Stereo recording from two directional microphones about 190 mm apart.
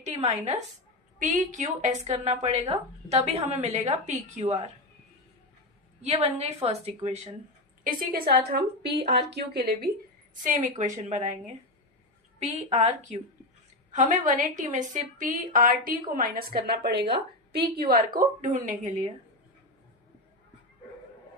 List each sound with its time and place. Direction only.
0.0 s a woman's voice: 35° right (ahead or behind)
6.0 s a woman's voice: 35° right (ahead or behind)
7.9 s a woman's voice: 50° right (ahead or behind)
10.4 s a woman's voice: 45° right (ahead or behind)
12.4 s a woman's voice: 35° right (ahead or behind)